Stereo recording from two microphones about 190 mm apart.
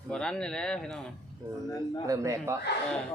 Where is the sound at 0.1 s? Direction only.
5° left (ahead or behind).